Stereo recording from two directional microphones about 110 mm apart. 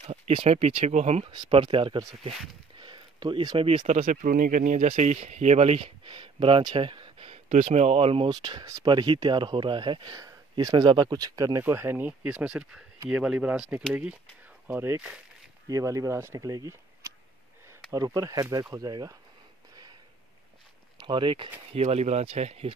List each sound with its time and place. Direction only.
0.0 s speech: 60° right (ahead or behind); by 1.2 s 85° right
1.5 s speech: 55° right (ahead or behind)
2.8 s a sound: 45° right (ahead or behind)
4.7 s speech: 90° right; by 8.3 s 60° right (ahead or behind)
8.3 s speech: 45° right (ahead or behind); by 15.0 s 20° right (ahead or behind)
15.7 s speech: 30° right (ahead or behind)
21.0 s speech: 50° right (ahead or behind)
21.7 s speech: 75° right (ahead or behind)